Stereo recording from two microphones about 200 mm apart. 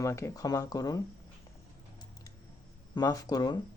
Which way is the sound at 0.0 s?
15° left (ahead or behind).